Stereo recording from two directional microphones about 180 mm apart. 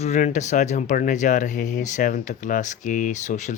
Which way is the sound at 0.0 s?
40° left (ahead or behind).